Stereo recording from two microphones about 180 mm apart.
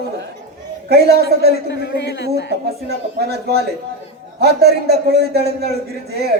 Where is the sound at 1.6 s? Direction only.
70° left (ahead or behind).